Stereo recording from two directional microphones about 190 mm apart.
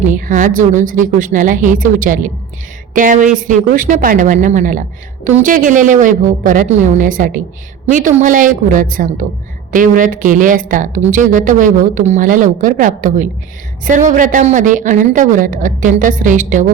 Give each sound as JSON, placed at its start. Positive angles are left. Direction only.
{"t": 0.1, "sound": "a woman's voice", "side_deg": -45}